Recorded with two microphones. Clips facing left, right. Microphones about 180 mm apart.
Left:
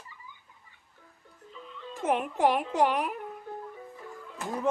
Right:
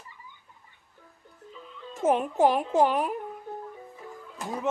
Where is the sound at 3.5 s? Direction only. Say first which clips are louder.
Right 1 dB; 15° right (ahead or behind).